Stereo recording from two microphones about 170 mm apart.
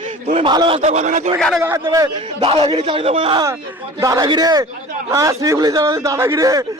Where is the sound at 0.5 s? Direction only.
30° right (ahead or behind).